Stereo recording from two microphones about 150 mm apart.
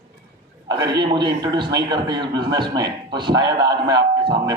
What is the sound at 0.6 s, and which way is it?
A man's voice, 25° right (ahead or behind).